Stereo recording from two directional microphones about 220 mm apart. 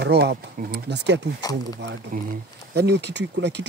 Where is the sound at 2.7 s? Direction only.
50° right (ahead or behind).